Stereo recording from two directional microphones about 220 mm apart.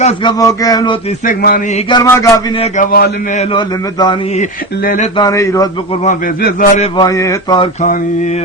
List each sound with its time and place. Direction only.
0.0 s speech: 20° left (ahead or behind)
1.2 s a man's voice: 40° left (ahead or behind)
1.9 s speech: 15° left (ahead or behind)
2.9 s a man's voice: 40° left (ahead or behind)
5.1 s speech: 15° left (ahead or behind)
6.1 s a man's voice: 35° left (ahead or behind)
6.9 s a sound: 15° left (ahead or behind)